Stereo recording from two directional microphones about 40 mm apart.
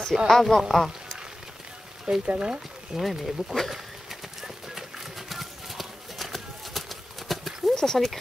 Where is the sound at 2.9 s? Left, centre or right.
Centre.